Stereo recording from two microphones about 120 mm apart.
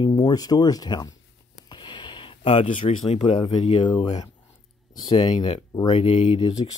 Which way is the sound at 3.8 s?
35° left (ahead or behind).